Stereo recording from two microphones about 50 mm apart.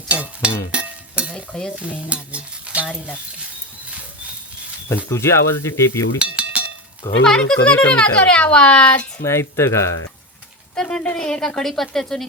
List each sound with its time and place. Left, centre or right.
0.1 s a sound: right
0.7 s stir: right
2.8 s speech: centre
3.8 s dog: right
5.0 s speech: left
6.1 s speech: right
6.4 s cowbell: right
7.3 s speech: centre
7.8 s speech: left
9.2 s speech: left
10.8 s a sound: centre
11.0 s a woman's voice: centre
11.6 s speech: centre